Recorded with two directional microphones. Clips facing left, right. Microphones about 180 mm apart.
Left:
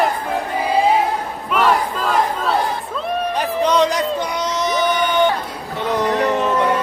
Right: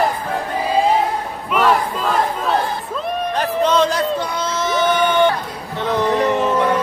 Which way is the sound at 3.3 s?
15° left (ahead or behind).